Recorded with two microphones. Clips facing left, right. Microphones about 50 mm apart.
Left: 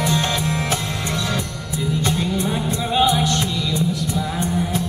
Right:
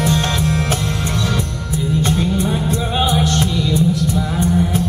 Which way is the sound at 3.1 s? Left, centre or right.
Right.